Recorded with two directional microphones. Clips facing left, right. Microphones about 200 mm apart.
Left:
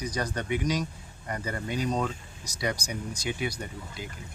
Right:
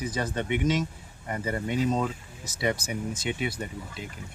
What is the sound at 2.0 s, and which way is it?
Speech, 5° right (ahead or behind).